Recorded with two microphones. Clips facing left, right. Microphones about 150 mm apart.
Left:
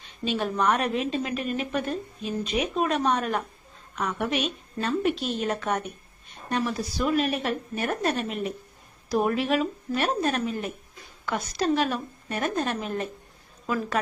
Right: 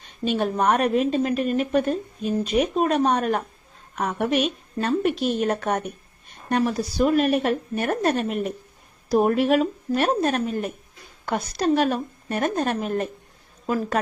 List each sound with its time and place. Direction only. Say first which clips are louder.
0.0 s a woman's voice: right 4 dB; 50° right (ahead or behind)